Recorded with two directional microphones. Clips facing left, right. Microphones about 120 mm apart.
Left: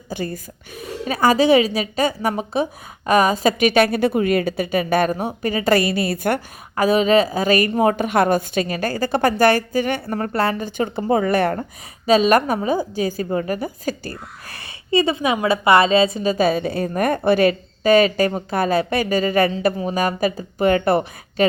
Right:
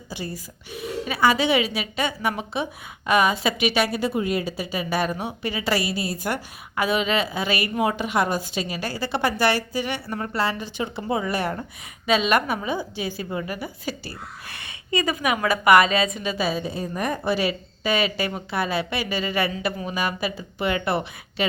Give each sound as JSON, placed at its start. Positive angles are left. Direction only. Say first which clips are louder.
{"t": 0.1, "sound": "a woman's voice", "louder": "left 6 dB", "side_deg": 50}
{"t": 6.7, "sound": "a woman's voice", "louder": "left 7 dB", "side_deg": 40}
{"t": 12.0, "sound": "a woman's voice", "louder": "left 6 dB", "side_deg": 40}
{"t": 16.5, "sound": "a woman's voice", "louder": "left 6 dB", "side_deg": 65}